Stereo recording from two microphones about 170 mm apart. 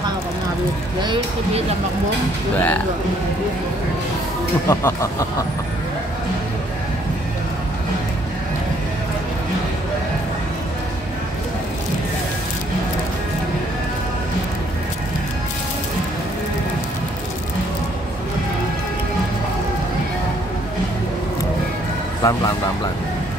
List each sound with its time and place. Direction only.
1.0 s speech: 30° right (ahead or behind)
4.6 s speech: 15° left (ahead or behind)
22.2 s speech: 20° left (ahead or behind)